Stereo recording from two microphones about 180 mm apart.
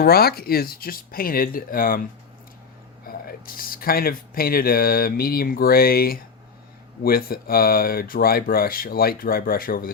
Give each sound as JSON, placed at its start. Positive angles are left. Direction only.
{"t": 0.0, "sound": "speech", "side_deg": 60}
{"t": 3.1, "sound": "speech", "side_deg": 55}